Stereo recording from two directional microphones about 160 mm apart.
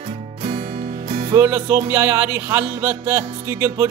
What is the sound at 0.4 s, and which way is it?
Music, 40° right (ahead or behind).